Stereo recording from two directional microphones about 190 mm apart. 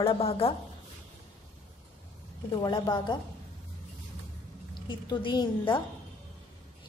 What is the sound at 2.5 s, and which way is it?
Speech, 25° left (ahead or behind).